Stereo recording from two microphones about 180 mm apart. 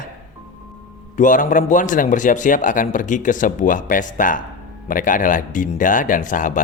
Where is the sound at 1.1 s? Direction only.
45° left (ahead or behind).